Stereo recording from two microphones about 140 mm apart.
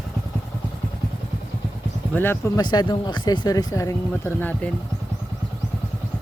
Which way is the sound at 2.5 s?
30° left (ahead or behind).